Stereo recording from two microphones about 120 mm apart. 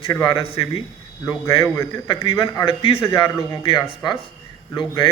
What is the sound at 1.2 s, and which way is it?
Speech, 25° left (ahead or behind).